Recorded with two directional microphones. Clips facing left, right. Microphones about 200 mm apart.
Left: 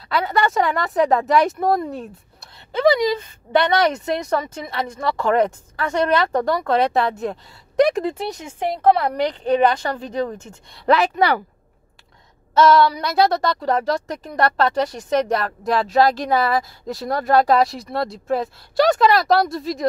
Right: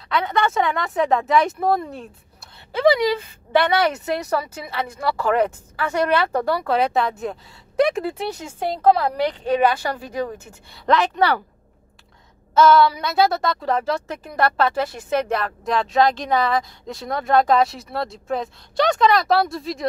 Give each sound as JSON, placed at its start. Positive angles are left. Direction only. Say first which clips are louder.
{"t": 0.1, "sound": "a woman's voice", "louder": "left 1 dB", "side_deg": 0}
{"t": 10.9, "sound": "speech", "louder": "left 2 dB", "side_deg": 10}
{"t": 12.5, "sound": "speech", "louder": "even", "side_deg": 0}